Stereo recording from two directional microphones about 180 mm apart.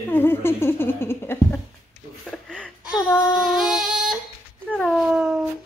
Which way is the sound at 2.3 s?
5° left (ahead or behind).